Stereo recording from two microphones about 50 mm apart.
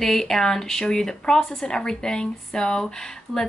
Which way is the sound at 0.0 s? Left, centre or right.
Centre.